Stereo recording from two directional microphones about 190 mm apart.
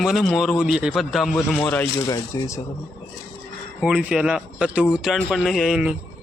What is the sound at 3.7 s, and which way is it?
A man's voice, 5° right (ahead or behind).